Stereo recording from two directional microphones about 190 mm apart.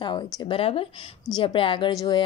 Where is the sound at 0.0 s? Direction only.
20° left (ahead or behind).